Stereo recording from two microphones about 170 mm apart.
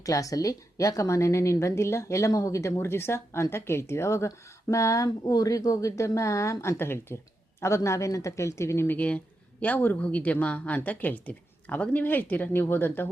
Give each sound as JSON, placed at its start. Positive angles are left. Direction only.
{"t": 0.0, "sound": "a woman's voice", "side_deg": 20}